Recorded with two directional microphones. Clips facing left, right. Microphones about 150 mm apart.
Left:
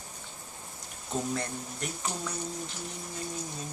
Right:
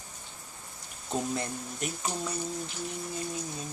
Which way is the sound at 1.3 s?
20° right (ahead or behind).